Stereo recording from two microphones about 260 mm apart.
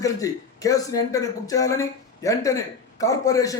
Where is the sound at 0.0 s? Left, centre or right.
Centre.